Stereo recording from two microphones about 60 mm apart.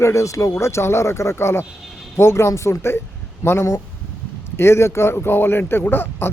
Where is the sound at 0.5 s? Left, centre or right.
Left.